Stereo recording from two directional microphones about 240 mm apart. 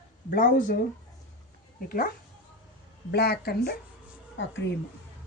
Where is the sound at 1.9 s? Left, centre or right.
Left.